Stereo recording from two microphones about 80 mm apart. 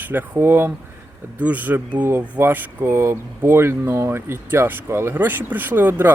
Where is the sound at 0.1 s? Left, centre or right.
Right.